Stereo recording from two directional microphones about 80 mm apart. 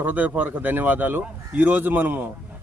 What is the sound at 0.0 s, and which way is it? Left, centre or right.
Speech, right.